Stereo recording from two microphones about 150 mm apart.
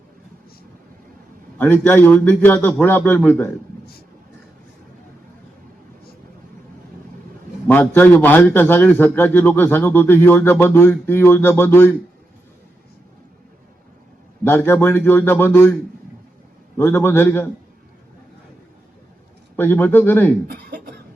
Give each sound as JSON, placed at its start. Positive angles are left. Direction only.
{"t": 1.5, "sound": "a man's voice", "side_deg": 10}
{"t": 7.7, "sound": "a man's voice", "side_deg": 10}
{"t": 14.4, "sound": "a man's voice", "side_deg": 15}
{"t": 16.7, "sound": "a man's voice", "side_deg": 15}
{"t": 19.5, "sound": "a man's voice", "side_deg": 15}
{"t": 20.5, "sound": "a sound", "side_deg": -90}